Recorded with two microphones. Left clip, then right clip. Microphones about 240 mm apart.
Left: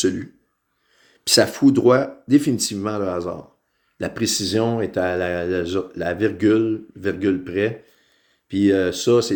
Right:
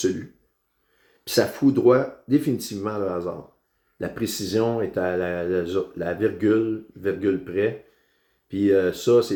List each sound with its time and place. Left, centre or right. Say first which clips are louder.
1.2 s speech: left 5 dB; left